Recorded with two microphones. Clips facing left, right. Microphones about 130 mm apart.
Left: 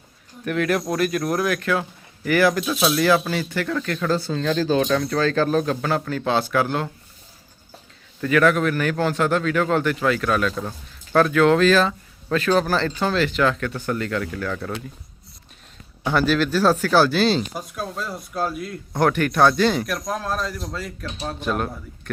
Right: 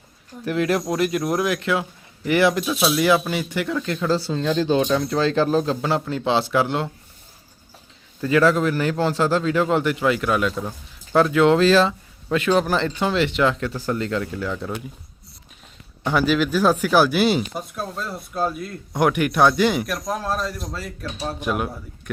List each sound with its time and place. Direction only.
0.4 s speech: 25° right (ahead or behind)
2.6 s speech: 5° right (ahead or behind); by 6.8 s 25° right (ahead or behind)
8.2 s speech: 25° right (ahead or behind)
12.3 s speech: 15° right (ahead or behind)
16.0 s speech: 10° right (ahead or behind)
17.5 s a man's voice: centre (ahead or behind)
18.9 s speech: 15° right (ahead or behind)
19.9 s a man's voice: 5° right (ahead or behind)